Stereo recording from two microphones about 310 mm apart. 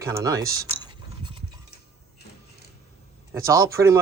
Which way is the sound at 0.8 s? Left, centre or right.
Centre.